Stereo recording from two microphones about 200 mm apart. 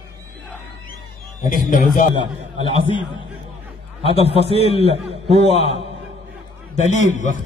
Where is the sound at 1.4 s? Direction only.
40° left (ahead or behind).